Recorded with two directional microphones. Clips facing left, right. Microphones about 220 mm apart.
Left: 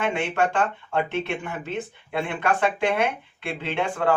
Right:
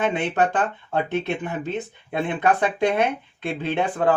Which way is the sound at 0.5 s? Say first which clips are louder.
Even; 35° right (ahead or behind).